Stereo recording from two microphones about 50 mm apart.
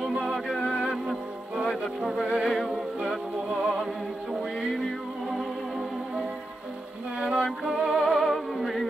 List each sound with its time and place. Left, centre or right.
0.0 s music: centre
2.5 s music: centre
7.2 s music: centre
7.6 s music: centre